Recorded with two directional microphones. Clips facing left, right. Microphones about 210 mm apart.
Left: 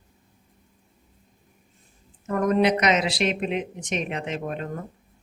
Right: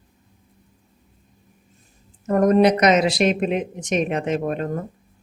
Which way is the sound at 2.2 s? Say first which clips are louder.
Right 5 dB; 40° right (ahead or behind).